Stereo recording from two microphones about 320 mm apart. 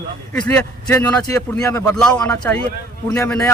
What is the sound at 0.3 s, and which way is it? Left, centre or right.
A man's voice, centre.